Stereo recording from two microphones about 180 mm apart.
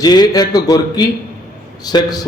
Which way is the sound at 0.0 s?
20° left (ahead or behind).